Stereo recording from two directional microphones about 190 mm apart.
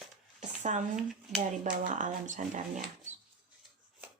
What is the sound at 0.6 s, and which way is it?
Speech, 40° right (ahead or behind).